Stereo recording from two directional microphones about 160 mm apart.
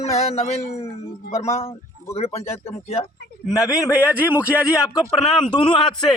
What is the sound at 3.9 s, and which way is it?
Speech, 10° right (ahead or behind).